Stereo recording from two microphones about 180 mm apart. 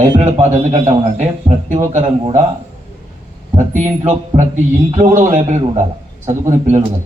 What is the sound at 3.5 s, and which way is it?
A man's voice, 40° right (ahead or behind).